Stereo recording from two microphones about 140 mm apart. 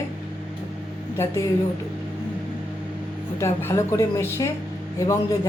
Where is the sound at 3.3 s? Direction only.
20° left (ahead or behind).